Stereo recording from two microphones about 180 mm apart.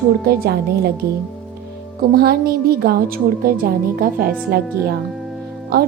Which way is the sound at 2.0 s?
60° right (ahead or behind).